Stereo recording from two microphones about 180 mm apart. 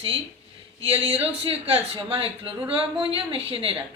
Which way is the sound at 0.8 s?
30° right (ahead or behind).